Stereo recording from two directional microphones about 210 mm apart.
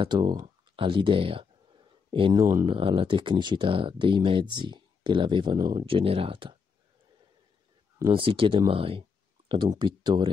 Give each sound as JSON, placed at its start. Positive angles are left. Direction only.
{"t": 0.0, "sound": "speech", "side_deg": -20}
{"t": 8.0, "sound": "speech", "side_deg": -25}